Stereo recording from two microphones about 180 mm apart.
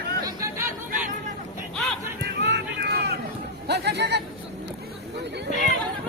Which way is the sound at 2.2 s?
70° right (ahead or behind).